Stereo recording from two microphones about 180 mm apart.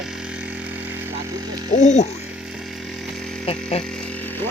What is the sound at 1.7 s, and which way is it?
Speech, 40° left (ahead or behind).